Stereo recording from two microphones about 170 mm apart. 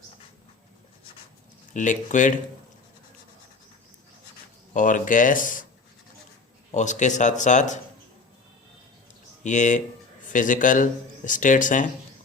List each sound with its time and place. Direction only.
1.7 s speech: 45° left (ahead or behind)
4.7 s speech: 50° left (ahead or behind)
6.7 s speech: 45° left (ahead or behind)
9.4 s speech: 45° left (ahead or behind)